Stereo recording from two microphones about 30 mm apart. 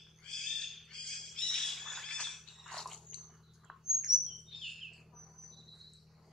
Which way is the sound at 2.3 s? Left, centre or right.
Centre.